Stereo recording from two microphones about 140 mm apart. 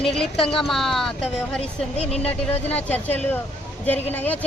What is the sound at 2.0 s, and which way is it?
Speech, 45° left (ahead or behind).